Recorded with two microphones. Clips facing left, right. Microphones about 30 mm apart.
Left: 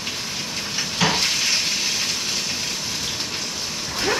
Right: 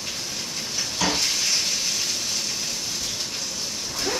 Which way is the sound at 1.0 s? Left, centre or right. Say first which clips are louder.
Left 4 dB; left.